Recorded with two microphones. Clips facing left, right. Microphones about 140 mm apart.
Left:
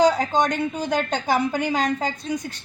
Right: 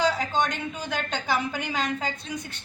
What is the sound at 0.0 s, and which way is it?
A woman's voice, 40° left (ahead or behind).